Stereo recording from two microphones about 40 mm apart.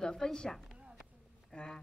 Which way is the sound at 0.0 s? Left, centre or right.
Centre.